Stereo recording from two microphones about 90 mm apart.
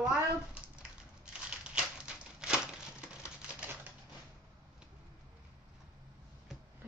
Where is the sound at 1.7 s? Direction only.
10° right (ahead or behind).